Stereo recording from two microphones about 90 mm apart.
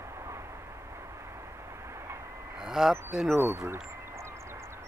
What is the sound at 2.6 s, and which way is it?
Speech, 5° right (ahead or behind).